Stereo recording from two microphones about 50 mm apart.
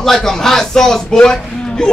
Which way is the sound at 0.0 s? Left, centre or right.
Centre.